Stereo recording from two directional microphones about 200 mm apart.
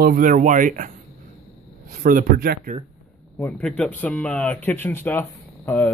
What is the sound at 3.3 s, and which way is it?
Speech, 5° left (ahead or behind).